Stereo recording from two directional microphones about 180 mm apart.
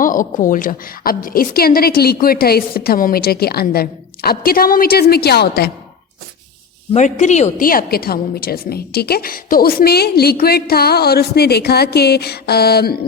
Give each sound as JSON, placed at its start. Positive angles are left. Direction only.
{"t": 0.0, "sound": "a woman's voice", "side_deg": 50}
{"t": 6.9, "sound": "speech", "side_deg": 40}
{"t": 7.7, "sound": "a woman's voice", "side_deg": 55}